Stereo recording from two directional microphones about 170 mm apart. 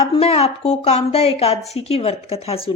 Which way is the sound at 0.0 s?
35° left (ahead or behind).